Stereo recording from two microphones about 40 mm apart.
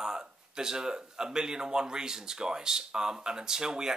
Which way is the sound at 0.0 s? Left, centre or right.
Centre.